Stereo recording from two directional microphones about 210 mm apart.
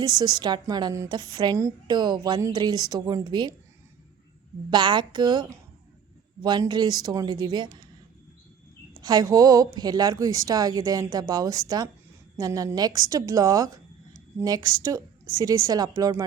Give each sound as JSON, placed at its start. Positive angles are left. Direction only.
{"t": 0.0, "sound": "a woman's voice", "side_deg": -20}
{"t": 4.7, "sound": "a woman's voice", "side_deg": -20}
{"t": 9.0, "sound": "a woman's voice", "side_deg": -20}